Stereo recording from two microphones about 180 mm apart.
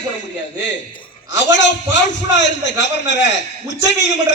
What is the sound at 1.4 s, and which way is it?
A man's voice, 80° left.